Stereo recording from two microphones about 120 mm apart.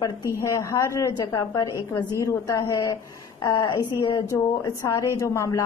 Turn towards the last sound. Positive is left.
turn(degrees=30)  # may be behind; listen again after turning